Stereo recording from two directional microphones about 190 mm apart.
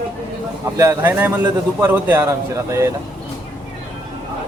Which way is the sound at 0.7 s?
15° right (ahead or behind).